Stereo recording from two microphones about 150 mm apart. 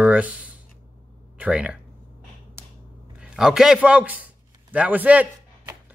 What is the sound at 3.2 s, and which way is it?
A man's voice, 5° right (ahead or behind).